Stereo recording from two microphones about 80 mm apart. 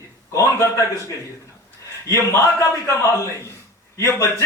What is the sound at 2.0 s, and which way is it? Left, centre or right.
A man's voice, left.